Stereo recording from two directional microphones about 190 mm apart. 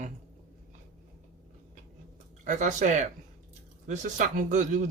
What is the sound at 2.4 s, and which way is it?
Speech, 40° right (ahead or behind).